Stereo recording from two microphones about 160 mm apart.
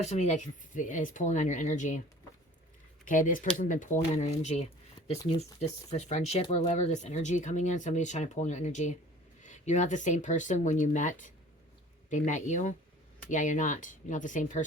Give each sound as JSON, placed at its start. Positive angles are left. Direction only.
{"t": 0.0, "sound": "speech", "side_deg": 45}
{"t": 3.0, "sound": "speech", "side_deg": 55}